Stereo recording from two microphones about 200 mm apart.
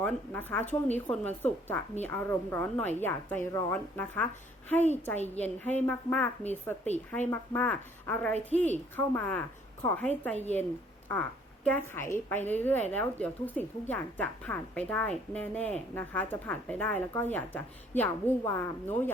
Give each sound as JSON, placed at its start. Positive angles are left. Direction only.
{"t": 0.0, "sound": "a woman's voice", "side_deg": 10}
{"t": 5.3, "sound": "a woman's voice", "side_deg": 10}
{"t": 8.3, "sound": "a woman's voice", "side_deg": -35}
{"t": 8.5, "sound": "a woman's voice", "side_deg": 10}